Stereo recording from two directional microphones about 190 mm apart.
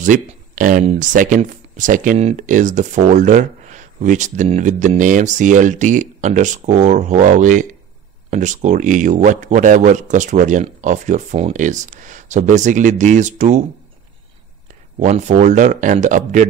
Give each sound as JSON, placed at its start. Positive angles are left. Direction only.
{"t": 0.0, "sound": "speech", "side_deg": -45}
{"t": 15.0, "sound": "speech", "side_deg": -40}